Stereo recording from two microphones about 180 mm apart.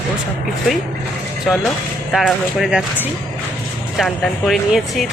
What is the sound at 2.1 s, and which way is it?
Speech, centre (ahead or behind).